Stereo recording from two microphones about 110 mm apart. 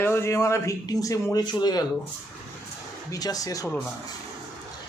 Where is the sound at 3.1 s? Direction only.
35° left (ahead or behind).